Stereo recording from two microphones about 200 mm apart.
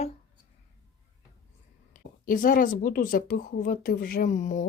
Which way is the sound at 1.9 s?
45° left (ahead or behind).